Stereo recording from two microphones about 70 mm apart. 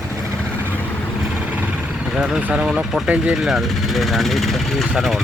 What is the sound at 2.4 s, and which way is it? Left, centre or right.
Speech, right.